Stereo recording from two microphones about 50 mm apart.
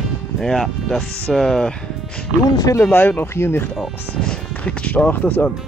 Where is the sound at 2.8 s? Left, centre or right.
Left.